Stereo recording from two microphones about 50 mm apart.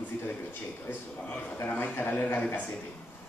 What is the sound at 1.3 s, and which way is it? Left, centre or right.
A man's voice, left.